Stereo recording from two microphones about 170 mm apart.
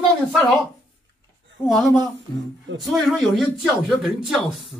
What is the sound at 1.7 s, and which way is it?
Speech, centre (ahead or behind).